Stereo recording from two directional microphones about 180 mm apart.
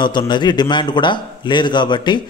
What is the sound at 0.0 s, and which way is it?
A man's voice, 25° left (ahead or behind).